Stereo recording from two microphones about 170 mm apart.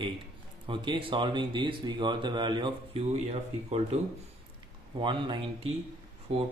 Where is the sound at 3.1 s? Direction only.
40° right (ahead or behind).